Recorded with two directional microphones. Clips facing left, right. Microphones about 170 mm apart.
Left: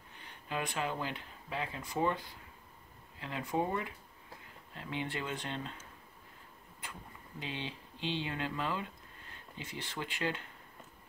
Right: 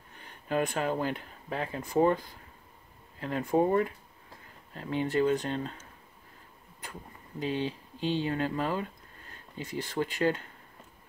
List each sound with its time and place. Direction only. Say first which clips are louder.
0.2 s speech: right 9 dB; 45° right (ahead or behind)
6.8 s speech: right 4 dB; 40° right (ahead or behind)